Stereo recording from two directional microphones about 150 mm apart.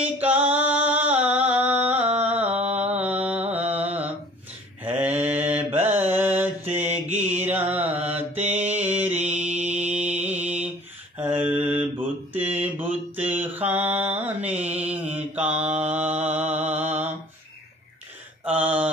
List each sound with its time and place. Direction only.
0.0 s music: 10° right (ahead or behind)
2.2 s mantra: 10° right (ahead or behind)
2.5 s mantra: 45° right (ahead or behind)
2.9 s mantra: 10° right (ahead or behind)
4.8 s a sound: 10° right (ahead or behind)
5.3 s mantra: 15° right (ahead or behind)
7.2 s music: 15° right (ahead or behind)
8.5 s mantra: 10° right (ahead or behind)
9.5 s mantra: 50° right (ahead or behind)
10.2 s mantra: 10° right (ahead or behind)
18.4 s mantra: 10° right (ahead or behind)